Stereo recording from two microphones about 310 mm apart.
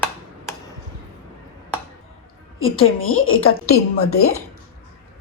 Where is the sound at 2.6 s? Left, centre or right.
Left.